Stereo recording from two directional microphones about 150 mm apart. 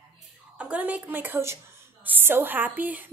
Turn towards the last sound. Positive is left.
turn(degrees=-10)  # may be behind; listen again after turning